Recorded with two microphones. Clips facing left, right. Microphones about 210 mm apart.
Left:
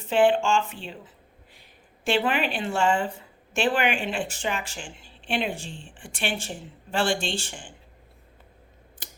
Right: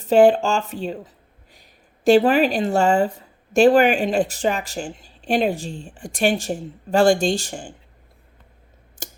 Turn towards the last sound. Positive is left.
turn(degrees=-40)  # may be behind; listen again after turning